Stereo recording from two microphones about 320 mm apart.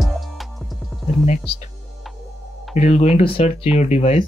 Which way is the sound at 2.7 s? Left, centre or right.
Centre.